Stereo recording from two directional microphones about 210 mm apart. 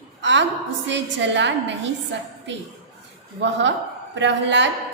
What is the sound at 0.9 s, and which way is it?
A woman's voice, 60° right (ahead or behind).